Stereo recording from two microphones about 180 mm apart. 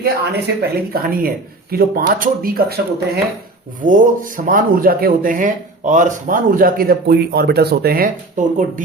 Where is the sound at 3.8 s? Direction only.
50° right (ahead or behind).